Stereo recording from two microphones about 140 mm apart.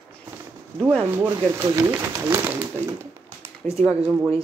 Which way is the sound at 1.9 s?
20° right (ahead or behind).